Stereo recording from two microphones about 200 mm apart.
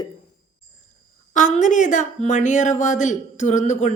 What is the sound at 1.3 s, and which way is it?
Speech, 40° left (ahead or behind).